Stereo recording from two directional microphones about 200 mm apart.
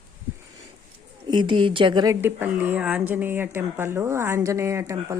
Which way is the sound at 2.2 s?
10° right (ahead or behind).